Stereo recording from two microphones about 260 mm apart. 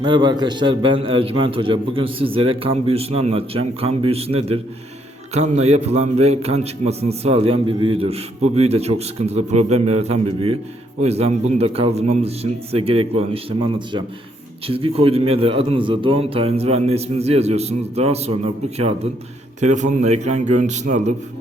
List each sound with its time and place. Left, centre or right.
0.0 s a man's voice: centre
19.5 s a man's voice: right